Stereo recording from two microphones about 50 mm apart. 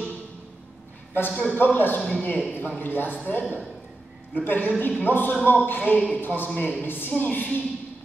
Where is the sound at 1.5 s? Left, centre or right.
Left.